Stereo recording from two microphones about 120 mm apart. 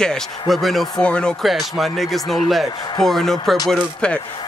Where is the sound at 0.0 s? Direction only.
5° left (ahead or behind).